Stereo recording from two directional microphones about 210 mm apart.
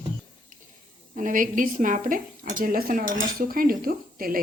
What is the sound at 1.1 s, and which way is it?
Speech, 40° right (ahead or behind).